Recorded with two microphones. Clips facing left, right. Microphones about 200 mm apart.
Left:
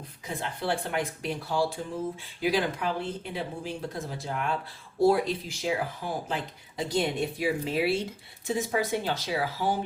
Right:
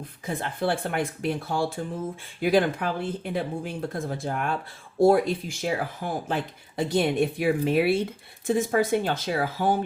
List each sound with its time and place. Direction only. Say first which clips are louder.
0.3 s speech: right 3 dB; 55° right (ahead or behind)